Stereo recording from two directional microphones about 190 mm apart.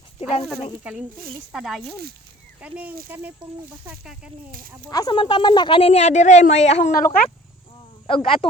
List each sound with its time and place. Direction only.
0.4 s speech: 5° right (ahead or behind)
1.1 s speech: 50° right (ahead or behind)
1.5 s speech: centre (ahead or behind)
1.8 s speech: 55° right (ahead or behind)
2.6 s speech: 5° right (ahead or behind)
4.9 s speech: 20° left (ahead or behind); by 6.9 s 35° left (ahead or behind)
6.9 s speech: 50° left (ahead or behind)
8.0 s speech: 30° left (ahead or behind)